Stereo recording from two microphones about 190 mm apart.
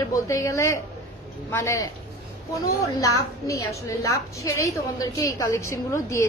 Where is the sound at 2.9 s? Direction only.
15° left (ahead or behind).